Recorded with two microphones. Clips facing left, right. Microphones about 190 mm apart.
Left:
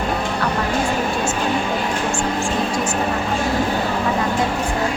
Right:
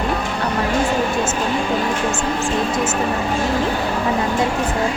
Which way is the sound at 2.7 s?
20° right (ahead or behind).